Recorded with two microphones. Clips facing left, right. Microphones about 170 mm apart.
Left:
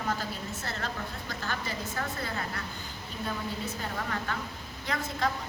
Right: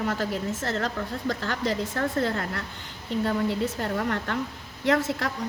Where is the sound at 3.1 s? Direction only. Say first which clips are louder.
Right 10 dB; 80° right.